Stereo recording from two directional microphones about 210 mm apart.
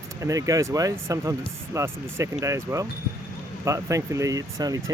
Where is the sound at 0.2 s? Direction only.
15° right (ahead or behind).